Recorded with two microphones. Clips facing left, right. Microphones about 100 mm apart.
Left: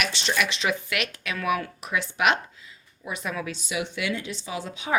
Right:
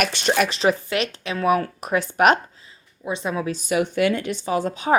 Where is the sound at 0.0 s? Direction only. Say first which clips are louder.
Right 6 dB; 50° right (ahead or behind).